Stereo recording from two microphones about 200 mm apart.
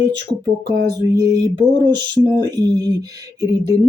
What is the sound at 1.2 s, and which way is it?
Speech, 20° right (ahead or behind).